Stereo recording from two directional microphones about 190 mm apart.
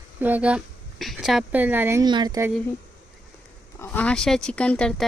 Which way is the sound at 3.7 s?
10° left (ahead or behind).